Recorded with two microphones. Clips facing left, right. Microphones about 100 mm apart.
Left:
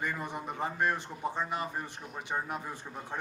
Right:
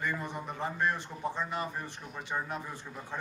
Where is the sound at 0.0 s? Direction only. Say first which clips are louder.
Even; 15° left (ahead or behind).